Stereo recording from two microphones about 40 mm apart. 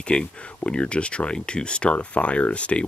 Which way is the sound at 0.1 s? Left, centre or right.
Left.